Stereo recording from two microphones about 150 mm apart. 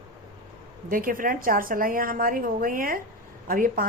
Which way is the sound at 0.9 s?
70° right (ahead or behind).